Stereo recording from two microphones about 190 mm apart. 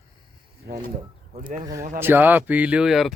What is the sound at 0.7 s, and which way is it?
Speech, 55° right (ahead or behind).